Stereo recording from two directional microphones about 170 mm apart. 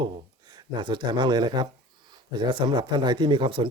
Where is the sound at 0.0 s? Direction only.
25° right (ahead or behind).